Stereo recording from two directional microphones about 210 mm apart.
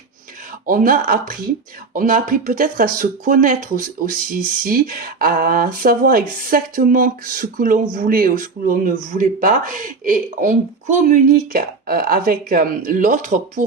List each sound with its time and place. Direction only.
0.6 s speech: 40° right (ahead or behind)